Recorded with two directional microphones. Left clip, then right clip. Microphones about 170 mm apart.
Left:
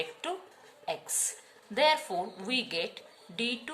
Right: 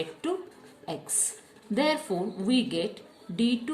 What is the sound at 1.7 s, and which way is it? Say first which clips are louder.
A woman's voice: left 1 dB; 30° left (ahead or behind).